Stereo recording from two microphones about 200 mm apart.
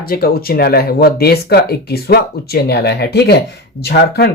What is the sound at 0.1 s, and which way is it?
Speech, 50° left (ahead or behind).